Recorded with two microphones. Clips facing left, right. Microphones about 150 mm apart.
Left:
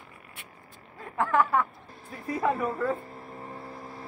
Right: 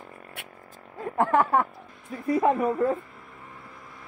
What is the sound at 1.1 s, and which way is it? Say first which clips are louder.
Speech: right 3 dB; 35° right (ahead or behind).